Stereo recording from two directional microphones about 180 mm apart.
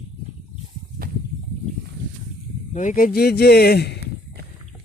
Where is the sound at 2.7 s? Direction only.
45° left (ahead or behind); by 4.0 s 65° left (ahead or behind).